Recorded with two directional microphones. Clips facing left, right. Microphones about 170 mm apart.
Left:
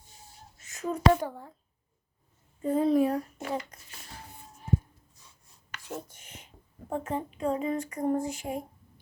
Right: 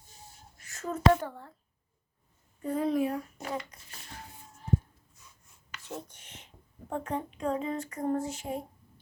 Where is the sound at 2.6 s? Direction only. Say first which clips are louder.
Left 4 dB; 25° left (ahead or behind); by 3.9 s 45° left (ahead or behind).